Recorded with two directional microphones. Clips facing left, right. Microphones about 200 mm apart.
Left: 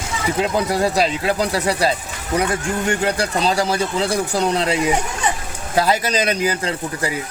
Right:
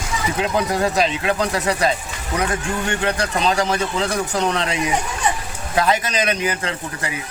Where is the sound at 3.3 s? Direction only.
35° left (ahead or behind).